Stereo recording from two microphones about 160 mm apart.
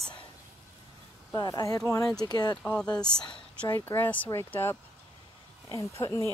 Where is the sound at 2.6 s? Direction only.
5° left (ahead or behind).